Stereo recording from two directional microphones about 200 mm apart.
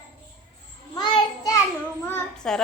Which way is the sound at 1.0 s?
20° left (ahead or behind).